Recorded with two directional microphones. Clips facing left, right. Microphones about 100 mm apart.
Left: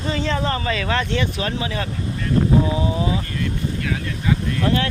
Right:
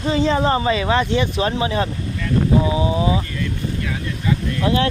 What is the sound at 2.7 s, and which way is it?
Speech, 15° right (ahead or behind).